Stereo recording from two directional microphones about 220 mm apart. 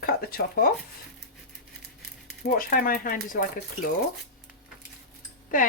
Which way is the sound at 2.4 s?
40° left (ahead or behind).